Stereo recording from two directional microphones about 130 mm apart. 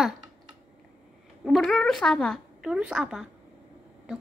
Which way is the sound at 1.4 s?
Centre (ahead or behind).